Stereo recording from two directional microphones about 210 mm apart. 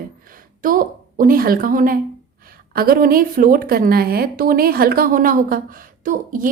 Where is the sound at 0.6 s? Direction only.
40° right (ahead or behind).